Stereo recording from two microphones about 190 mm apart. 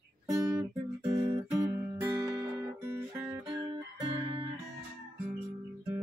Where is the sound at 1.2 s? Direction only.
25° right (ahead or behind); by 3.4 s 10° right (ahead or behind).